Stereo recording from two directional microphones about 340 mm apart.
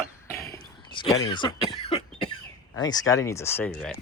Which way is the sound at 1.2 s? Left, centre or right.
Centre.